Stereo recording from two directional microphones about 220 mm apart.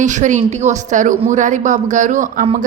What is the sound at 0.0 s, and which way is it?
Speech, 35° right (ahead or behind).